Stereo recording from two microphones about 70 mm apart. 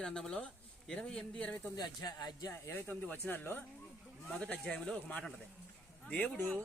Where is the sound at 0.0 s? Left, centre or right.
Centre.